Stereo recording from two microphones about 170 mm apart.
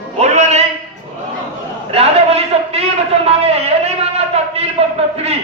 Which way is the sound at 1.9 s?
35° right (ahead or behind).